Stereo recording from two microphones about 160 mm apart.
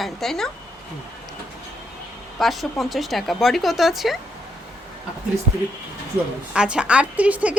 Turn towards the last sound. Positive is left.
turn(degrees=-10)  # may be behind; listen again after turning